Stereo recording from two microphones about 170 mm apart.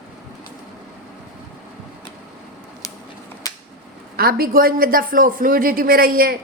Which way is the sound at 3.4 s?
20° left (ahead or behind).